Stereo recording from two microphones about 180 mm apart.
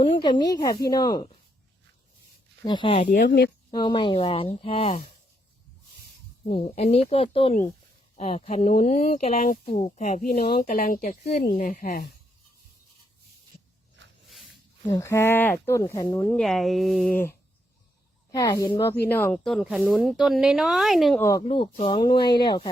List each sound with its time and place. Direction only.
0.0 s a woman's voice: 30° left (ahead or behind)
2.6 s a woman's voice: 25° left (ahead or behind)
3.2 s a woman's voice: 65° left (ahead or behind)
3.7 s speech: 25° left (ahead or behind)
6.5 s speech: 35° left (ahead or behind); by 12.0 s 55° left (ahead or behind)
14.8 s speech: 15° left (ahead or behind)
16.4 s speech: centre (ahead or behind)
18.3 s a woman's voice: 20° left (ahead or behind); by 21.2 s centre (ahead or behind)
21.2 s speech: 15° left (ahead or behind)
21.4 s a woman's voice: 30° left (ahead or behind)